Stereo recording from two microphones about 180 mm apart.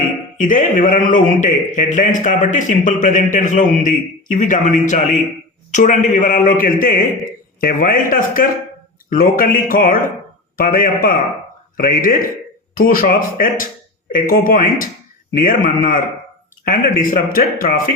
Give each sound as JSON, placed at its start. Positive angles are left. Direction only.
{"t": 0.3, "sound": "a man's voice", "side_deg": 45}